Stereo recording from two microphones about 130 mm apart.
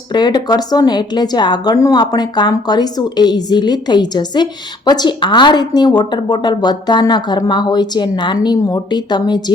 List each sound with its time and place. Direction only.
0.1 s a woman's voice: 35° left (ahead or behind)